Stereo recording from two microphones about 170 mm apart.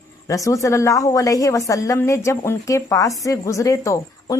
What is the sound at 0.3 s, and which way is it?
Speech, 20° left (ahead or behind).